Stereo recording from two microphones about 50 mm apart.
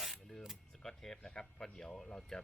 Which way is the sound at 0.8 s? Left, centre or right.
Centre.